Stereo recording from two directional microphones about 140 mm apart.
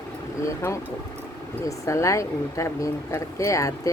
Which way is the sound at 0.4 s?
20° left (ahead or behind).